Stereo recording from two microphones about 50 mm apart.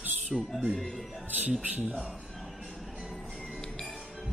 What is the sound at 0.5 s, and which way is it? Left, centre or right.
Music, centre.